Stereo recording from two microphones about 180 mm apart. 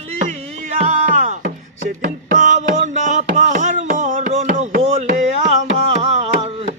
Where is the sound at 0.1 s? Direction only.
40° right (ahead or behind).